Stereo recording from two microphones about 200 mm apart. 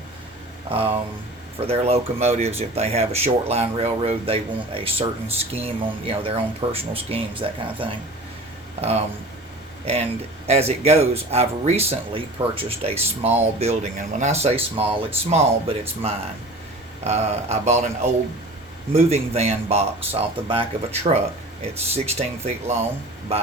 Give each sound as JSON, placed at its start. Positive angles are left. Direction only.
{"t": 0.7, "sound": "speech", "side_deg": -30}